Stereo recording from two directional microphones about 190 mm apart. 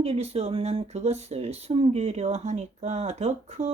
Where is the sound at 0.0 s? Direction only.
30° right (ahead or behind).